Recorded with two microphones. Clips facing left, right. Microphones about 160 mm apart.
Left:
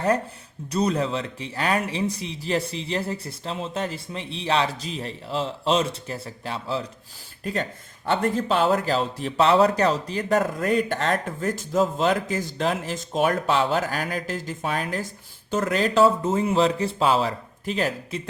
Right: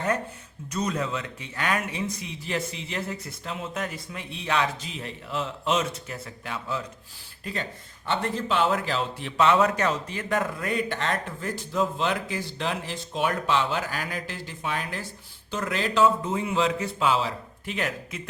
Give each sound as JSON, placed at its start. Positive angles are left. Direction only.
{"t": 0.7, "sound": "speech", "side_deg": 35}
{"t": 7.4, "sound": "speech", "side_deg": 45}